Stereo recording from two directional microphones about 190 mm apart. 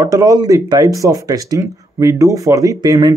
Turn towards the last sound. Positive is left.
turn(degrees=-20)  # may be behind; listen again after turning